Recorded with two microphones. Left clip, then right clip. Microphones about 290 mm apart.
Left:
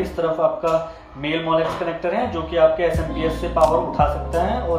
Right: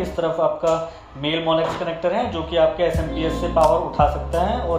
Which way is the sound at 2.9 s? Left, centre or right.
Centre.